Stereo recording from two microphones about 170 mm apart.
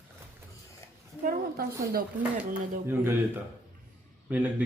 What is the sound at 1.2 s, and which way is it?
Speech, 60° right (ahead or behind).